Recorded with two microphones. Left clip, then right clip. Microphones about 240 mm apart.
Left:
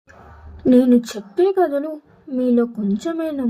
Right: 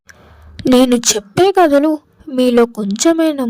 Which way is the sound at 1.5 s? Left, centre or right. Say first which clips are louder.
Right 11 dB; right.